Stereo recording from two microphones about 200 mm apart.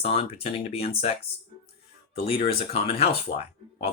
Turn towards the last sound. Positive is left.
turn(degrees=30)  # may be behind; listen again after turning